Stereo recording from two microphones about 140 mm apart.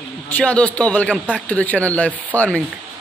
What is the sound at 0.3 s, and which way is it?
Speech, 10° left (ahead or behind).